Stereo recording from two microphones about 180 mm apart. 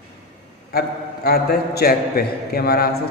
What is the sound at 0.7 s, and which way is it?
A man's voice, 55° left (ahead or behind).